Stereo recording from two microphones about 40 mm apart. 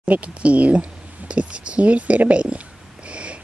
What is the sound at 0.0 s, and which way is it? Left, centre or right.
Speech, right.